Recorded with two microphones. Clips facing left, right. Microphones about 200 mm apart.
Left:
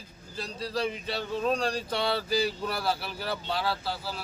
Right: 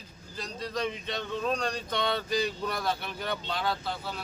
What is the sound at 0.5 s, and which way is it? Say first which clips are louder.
Speech: left 2 dB; 35° left (ahead or behind).